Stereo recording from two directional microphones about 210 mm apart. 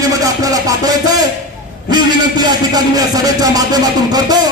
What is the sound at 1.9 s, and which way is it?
A man's voice, 20° right (ahead or behind).